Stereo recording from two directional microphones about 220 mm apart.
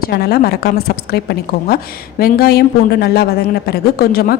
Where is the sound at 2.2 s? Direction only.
45° left (ahead or behind).